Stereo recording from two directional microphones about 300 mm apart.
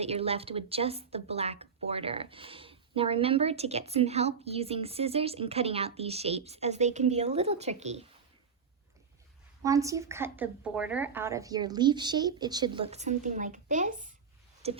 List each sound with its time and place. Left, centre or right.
0.0 s speech: centre
9.6 s speech: centre